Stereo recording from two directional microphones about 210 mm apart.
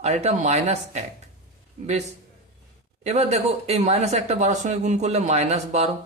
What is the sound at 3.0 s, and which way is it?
Speech, 30° right (ahead or behind).